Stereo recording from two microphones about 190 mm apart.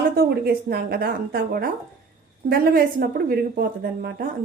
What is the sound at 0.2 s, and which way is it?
Speech, 55° right (ahead or behind).